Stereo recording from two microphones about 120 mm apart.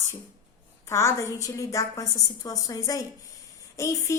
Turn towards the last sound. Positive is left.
turn(degrees=25)  # may be behind; listen again after turning